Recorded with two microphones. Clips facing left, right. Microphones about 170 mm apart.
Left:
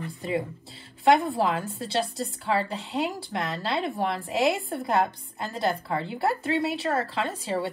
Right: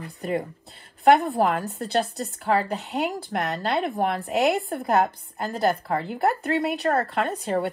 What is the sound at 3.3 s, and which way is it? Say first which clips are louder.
Speech: right 3 dB; 45° right (ahead or behind).